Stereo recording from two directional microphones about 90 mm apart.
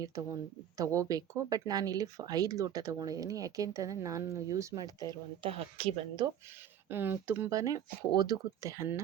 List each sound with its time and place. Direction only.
0.8 s speech: 40° right (ahead or behind)
5.4 s speech: 90° right
6.8 s speech: 25° right (ahead or behind)
7.5 s speech: 40° right (ahead or behind)